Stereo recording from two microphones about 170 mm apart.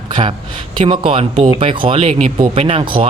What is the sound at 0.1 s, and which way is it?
Speech, 30° right (ahead or behind).